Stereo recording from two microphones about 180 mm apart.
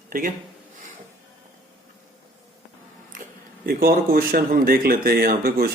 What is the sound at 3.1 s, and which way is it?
A man's voice, 50° right (ahead or behind).